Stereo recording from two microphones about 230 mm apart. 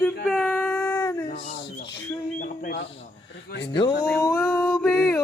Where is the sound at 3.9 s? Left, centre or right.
Left.